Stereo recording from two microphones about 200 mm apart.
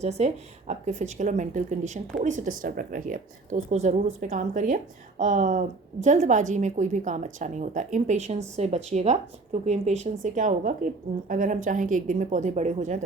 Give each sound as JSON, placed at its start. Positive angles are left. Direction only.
{"t": 0.0, "sound": "a woman's voice", "side_deg": -35}